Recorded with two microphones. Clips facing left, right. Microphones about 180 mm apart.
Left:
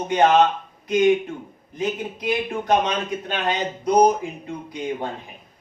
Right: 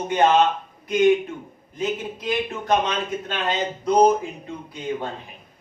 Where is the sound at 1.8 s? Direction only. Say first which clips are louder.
Even; 15° left (ahead or behind).